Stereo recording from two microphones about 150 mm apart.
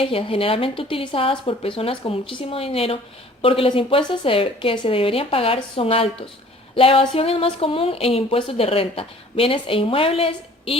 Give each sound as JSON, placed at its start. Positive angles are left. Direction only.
{"t": 0.0, "sound": "speech", "side_deg": 35}